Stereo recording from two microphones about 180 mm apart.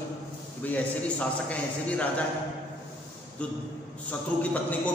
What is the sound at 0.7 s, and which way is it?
A man's voice, 5° left (ahead or behind).